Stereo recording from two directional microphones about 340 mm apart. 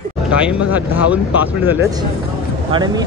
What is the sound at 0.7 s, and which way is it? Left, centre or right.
Speech, centre.